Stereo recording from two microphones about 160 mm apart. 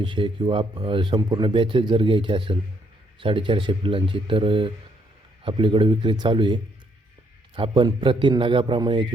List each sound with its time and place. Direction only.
0.0 s speech: 30° right (ahead or behind)